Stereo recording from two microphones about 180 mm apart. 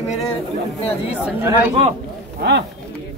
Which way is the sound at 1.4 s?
10° right (ahead or behind).